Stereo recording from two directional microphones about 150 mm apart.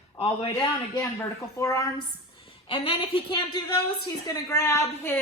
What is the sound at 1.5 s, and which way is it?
Speech, 25° left (ahead or behind).